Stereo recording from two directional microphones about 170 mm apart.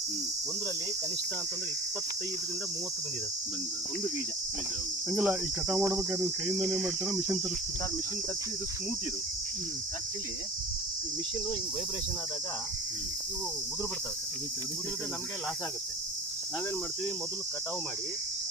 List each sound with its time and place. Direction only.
5.1 s cricket: 5° right (ahead or behind)